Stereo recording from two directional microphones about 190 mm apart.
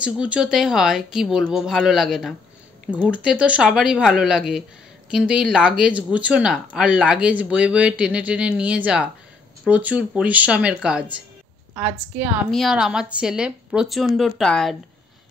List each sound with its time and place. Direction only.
0.0 s a woman's voice: 5° right (ahead or behind)